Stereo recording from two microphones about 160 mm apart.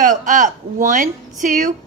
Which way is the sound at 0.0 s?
55° right (ahead or behind).